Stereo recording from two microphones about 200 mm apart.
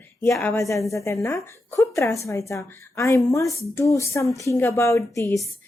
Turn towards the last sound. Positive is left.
turn(degrees=15)  # may be behind; listen again after turning